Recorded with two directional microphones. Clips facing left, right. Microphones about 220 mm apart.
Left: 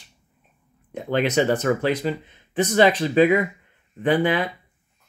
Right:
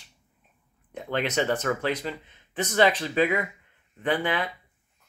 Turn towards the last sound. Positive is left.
turn(degrees=15)  # may be behind; listen again after turning